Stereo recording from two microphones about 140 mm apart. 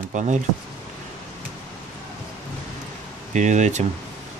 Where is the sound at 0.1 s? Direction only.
60° right (ahead or behind).